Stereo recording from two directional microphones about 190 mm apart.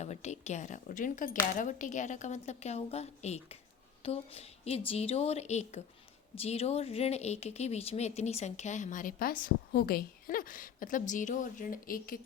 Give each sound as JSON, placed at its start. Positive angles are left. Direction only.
{"t": 0.0, "sound": "a woman's voice", "side_deg": 35}